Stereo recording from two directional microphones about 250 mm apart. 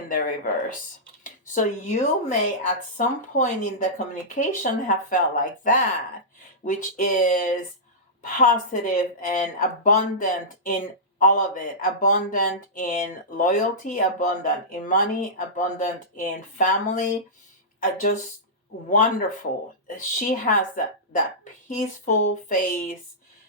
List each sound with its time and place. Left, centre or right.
0.1 s speech: left